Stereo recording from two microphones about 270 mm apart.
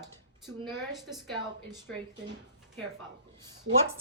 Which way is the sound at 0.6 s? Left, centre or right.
Centre.